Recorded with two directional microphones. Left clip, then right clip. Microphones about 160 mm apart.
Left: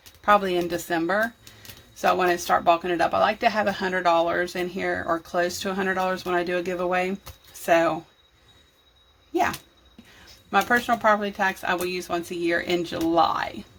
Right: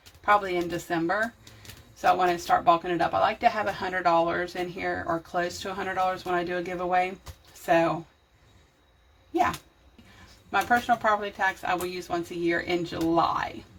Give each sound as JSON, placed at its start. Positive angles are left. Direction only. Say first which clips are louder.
{"t": 0.3, "sound": "speech", "louder": "left 3 dB", "side_deg": 45}
{"t": 10.5, "sound": "speech", "louder": "left 2 dB", "side_deg": 45}